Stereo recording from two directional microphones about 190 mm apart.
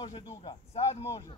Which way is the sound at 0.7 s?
35° left (ahead or behind).